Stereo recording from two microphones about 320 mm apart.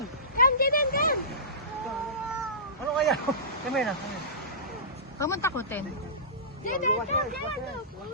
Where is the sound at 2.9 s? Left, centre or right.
Centre.